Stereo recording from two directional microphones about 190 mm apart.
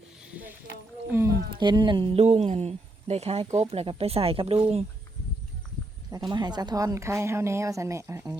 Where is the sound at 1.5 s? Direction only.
25° right (ahead or behind).